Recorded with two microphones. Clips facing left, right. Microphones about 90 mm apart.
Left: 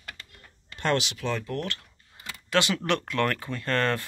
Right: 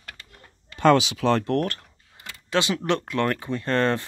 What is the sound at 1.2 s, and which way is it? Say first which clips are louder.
Speech: right 9 dB; 80° right.